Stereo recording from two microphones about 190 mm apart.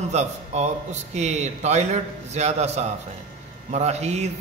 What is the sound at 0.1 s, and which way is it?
A man's voice, 35° right (ahead or behind).